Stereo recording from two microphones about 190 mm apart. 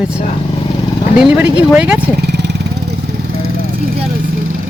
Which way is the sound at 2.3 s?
65° right (ahead or behind).